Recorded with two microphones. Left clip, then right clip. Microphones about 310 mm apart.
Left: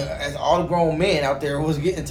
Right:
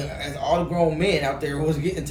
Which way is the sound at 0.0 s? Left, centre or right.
Centre.